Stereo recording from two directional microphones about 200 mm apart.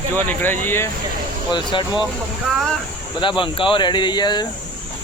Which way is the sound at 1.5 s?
25° left (ahead or behind).